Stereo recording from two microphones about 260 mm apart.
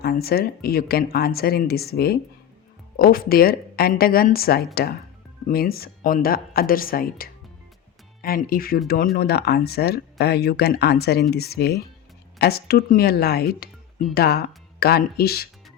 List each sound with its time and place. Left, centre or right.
0.0 s speech: left